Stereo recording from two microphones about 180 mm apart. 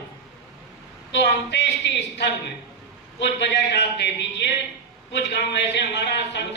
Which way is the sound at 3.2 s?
75° left (ahead or behind).